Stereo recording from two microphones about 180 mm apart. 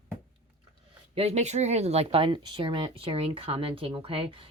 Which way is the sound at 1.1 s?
35° right (ahead or behind).